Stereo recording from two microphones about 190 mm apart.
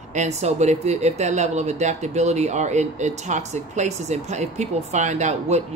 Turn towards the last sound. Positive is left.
turn(degrees=-35)  # may be behind; listen again after turning